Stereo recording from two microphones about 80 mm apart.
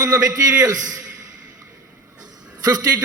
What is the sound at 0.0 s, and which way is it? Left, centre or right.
A man's voice, right.